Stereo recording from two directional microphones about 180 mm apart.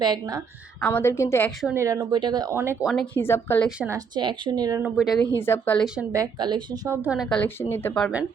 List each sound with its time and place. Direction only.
0.0 s a woman's voice: 20° right (ahead or behind)
0.8 s a woman's voice: 10° left (ahead or behind)
1.7 s speech: 15° right (ahead or behind)
2.8 s speech: centre (ahead or behind)
3.2 s a woman's voice: 15° left (ahead or behind)
3.8 s a woman's voice: 15° right (ahead or behind)
4.8 s speech: 5° right (ahead or behind)
5.3 s a woman's voice: 10° left (ahead or behind)
6.1 s speech: 20° right (ahead or behind); by 8.1 s 10° left (ahead or behind)